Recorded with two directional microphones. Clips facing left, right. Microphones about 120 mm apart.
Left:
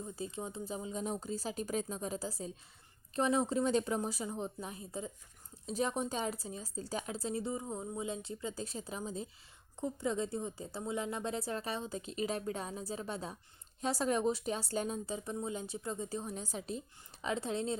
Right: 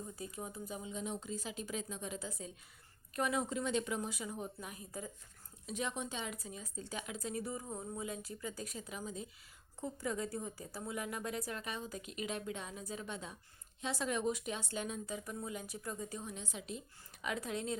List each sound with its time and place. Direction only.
0.0 s speech: 25° left (ahead or behind)
5.6 s a woman's voice: 35° left (ahead or behind)